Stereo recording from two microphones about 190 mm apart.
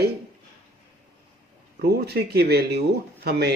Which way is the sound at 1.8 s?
55° right (ahead or behind).